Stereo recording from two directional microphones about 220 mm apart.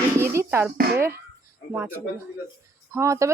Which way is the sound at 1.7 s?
10° right (ahead or behind).